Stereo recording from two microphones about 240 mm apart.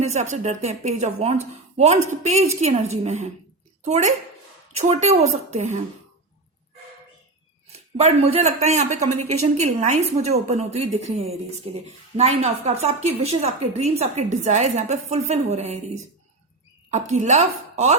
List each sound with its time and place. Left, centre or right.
0.0 s speech: right
7.9 s speech: right